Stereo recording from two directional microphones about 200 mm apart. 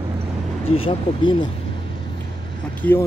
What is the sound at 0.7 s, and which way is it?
Speech, 25° left (ahead or behind).